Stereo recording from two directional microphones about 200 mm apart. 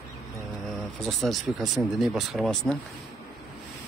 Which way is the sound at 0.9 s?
Centre (ahead or behind).